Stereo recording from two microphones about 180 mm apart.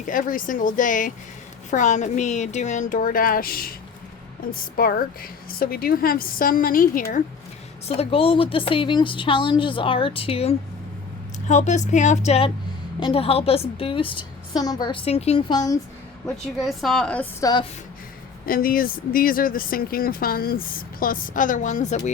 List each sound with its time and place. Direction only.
0.0 s speech: 45° left (ahead or behind)
7.9 s a woman's voice: 30° left (ahead or behind)
16.2 s a woman's voice: centre (ahead or behind)
17.4 s a woman's voice: 25° left (ahead or behind)
18.4 s speech: 55° left (ahead or behind)